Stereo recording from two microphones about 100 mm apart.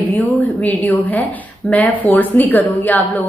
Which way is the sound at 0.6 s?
15° left (ahead or behind).